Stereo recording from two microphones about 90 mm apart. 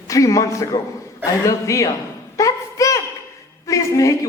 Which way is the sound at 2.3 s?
40° left (ahead or behind).